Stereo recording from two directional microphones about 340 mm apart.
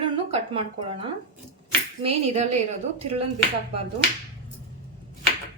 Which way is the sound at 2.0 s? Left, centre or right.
Centre.